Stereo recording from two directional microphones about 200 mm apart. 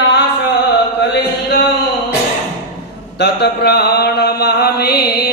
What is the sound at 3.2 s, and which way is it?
Mantra, 55° left (ahead or behind).